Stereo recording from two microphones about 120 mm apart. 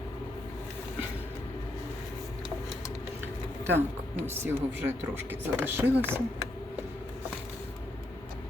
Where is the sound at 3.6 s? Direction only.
20° right (ahead or behind).